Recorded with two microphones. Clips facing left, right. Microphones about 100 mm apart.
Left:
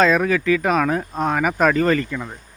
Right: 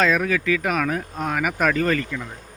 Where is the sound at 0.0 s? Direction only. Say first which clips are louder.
Left 4 dB; 35° left (ahead or behind).